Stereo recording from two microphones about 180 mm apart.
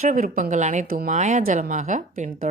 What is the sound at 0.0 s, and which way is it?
A woman's voice, 45° right (ahead or behind).